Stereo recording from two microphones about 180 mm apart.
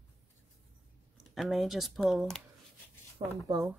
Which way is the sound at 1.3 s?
Centre (ahead or behind).